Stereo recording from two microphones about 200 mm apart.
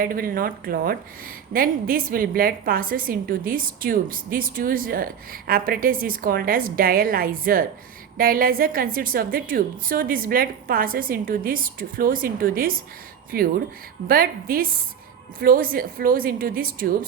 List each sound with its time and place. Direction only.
0.0 s a woman's voice: 45° right (ahead or behind)